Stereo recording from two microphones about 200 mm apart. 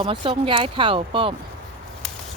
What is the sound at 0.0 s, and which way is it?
Speech, 25° right (ahead or behind).